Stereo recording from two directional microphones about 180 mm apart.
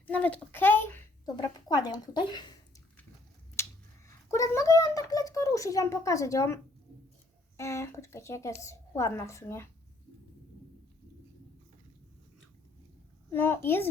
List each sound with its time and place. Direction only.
0.1 s a child's voice: 10° left (ahead or behind)
1.4 s a woman's voice: 25° left (ahead or behind)
3.6 s a sound: 15° left (ahead or behind)
4.3 s a child's voice: 15° left (ahead or behind)
13.3 s a woman's voice: 10° left (ahead or behind)